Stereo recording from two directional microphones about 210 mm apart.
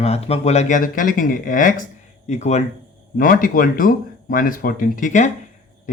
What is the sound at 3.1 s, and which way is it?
Speech, 45° left (ahead or behind).